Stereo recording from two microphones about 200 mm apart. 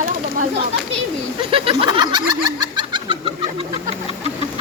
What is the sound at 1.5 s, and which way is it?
Speech, 25° right (ahead or behind).